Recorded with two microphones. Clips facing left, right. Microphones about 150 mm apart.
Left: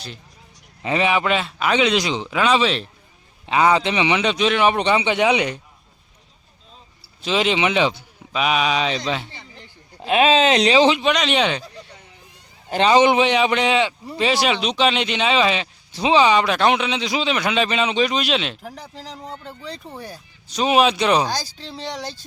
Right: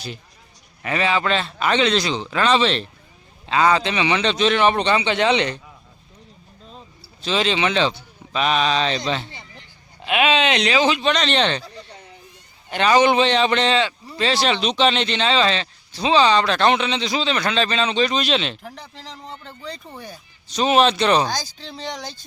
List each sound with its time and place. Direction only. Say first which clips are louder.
0.8 s a man's voice: left 2 dB; 20° left (ahead or behind); by 2.9 s 5° left (ahead or behind)
3.4 s a man's voice: left 1 dB; 15° left (ahead or behind)
7.3 s a man's voice: left 1 dB; 15° left (ahead or behind)
10.0 s speech: left 3 dB; 35° left (ahead or behind)
11.0 s a man's voice: left 1 dB; 10° left (ahead or behind)
12.7 s a man's voice: left 1 dB; 25° left (ahead or behind); by 22.2 s 5° left (ahead or behind)